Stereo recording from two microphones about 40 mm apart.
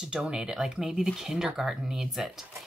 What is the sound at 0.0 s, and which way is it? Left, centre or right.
Speech, centre.